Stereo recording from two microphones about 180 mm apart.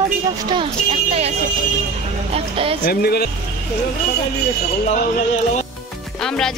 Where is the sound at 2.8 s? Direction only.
60° left (ahead or behind).